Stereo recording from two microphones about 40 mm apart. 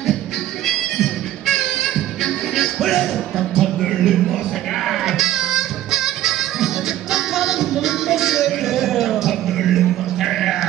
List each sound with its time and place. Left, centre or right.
0.7 s music: centre
5.0 s music: centre
9.3 s a sound: centre